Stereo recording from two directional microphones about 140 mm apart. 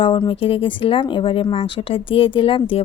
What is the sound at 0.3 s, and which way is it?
A woman's voice, 40° left (ahead or behind).